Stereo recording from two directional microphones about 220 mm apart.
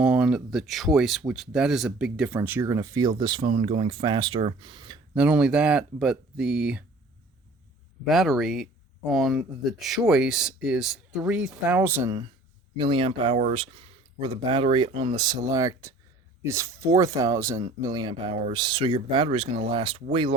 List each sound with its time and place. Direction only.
0.0 s speech: 5° right (ahead or behind); by 4.9 s 20° right (ahead or behind)
5.1 s speech: 5° right (ahead or behind)
8.0 s speech: centre (ahead or behind)
12.7 s speech: 25° right (ahead or behind)